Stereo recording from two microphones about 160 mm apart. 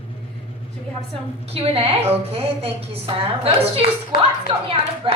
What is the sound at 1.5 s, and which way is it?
A woman's voice, 40° right (ahead or behind).